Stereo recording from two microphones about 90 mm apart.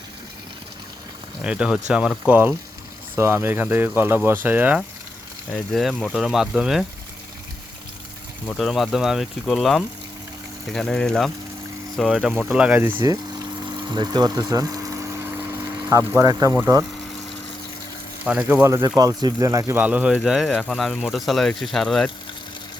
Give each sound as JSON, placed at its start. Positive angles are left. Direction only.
{"t": 1.5, "sound": "speech", "side_deg": -10}
{"t": 3.2, "sound": "speech", "side_deg": -25}
{"t": 5.5, "sound": "speech", "side_deg": 0}
{"t": 8.4, "sound": "speech", "side_deg": 0}
{"t": 12.5, "sound": "speech", "side_deg": -15}
{"t": 13.0, "sound": "speech", "side_deg": -40}
{"t": 13.8, "sound": "speech", "side_deg": -55}
{"t": 18.3, "sound": "speech", "side_deg": -15}
{"t": 18.6, "sound": "speech", "side_deg": -35}
{"t": 19.8, "sound": "speech", "side_deg": -15}